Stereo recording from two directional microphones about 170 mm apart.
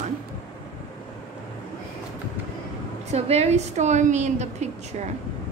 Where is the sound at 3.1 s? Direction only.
40° right (ahead or behind).